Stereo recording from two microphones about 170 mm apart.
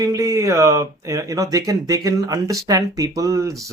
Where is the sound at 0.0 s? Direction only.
20° right (ahead or behind).